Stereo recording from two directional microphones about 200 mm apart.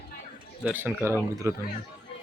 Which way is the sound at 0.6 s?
10° right (ahead or behind).